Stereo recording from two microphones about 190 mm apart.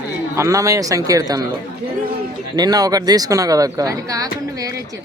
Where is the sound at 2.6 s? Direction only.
20° right (ahead or behind).